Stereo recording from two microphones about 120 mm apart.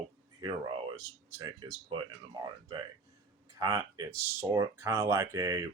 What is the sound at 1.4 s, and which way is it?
Speech, 40° right (ahead or behind).